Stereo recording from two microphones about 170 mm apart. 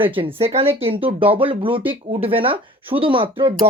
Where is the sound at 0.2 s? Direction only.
35° right (ahead or behind).